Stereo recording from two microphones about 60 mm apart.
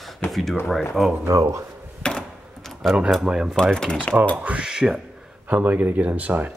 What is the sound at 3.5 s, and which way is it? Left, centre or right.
Speech, centre.